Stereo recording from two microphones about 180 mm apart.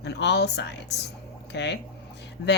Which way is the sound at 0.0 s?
70° left (ahead or behind).